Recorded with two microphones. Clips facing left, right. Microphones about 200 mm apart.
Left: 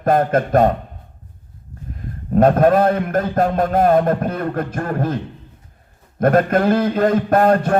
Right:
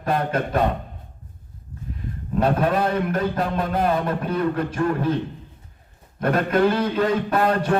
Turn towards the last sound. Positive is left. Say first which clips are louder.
# left 6 dB
turn(degrees=50)  # may be behind; listen again after turning